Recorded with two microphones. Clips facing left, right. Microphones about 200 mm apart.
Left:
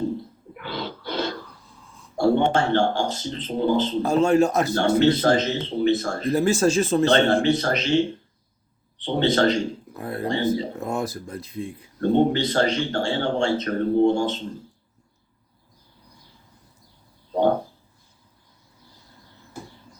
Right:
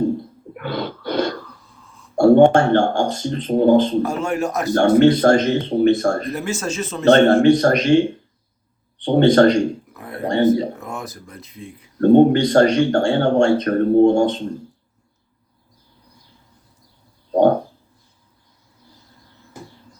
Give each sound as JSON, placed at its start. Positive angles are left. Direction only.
{"t": 0.5, "sound": "throat clearing", "side_deg": -55}
{"t": 2.1, "sound": "speech", "side_deg": -50}
{"t": 4.0, "sound": "speech", "side_deg": 25}
{"t": 4.7, "sound": "speech", "side_deg": -50}
{"t": 6.3, "sound": "speech", "side_deg": 35}
{"t": 7.1, "sound": "speech", "side_deg": -50}
{"t": 9.0, "sound": "speech", "side_deg": -45}
{"t": 9.9, "sound": "a sound", "side_deg": 30}
{"t": 10.2, "sound": "speech", "side_deg": -50}
{"t": 10.8, "sound": "speech", "side_deg": 30}
{"t": 11.9, "sound": "speech", "side_deg": -50}